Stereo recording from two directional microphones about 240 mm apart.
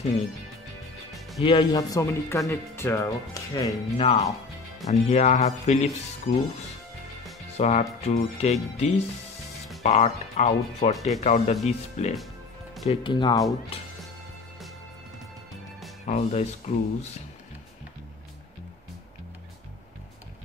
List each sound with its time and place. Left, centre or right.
1.4 s speech: left
3.9 s speech: left
7.5 s speech: left
16.1 s speech: left